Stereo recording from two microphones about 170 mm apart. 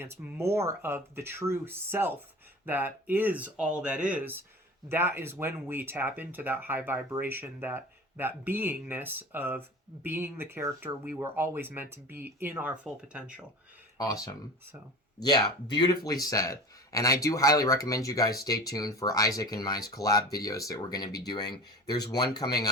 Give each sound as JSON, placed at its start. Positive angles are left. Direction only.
{"t": 0.0, "sound": "speech", "side_deg": -15}
{"t": 15.2, "sound": "speech", "side_deg": 25}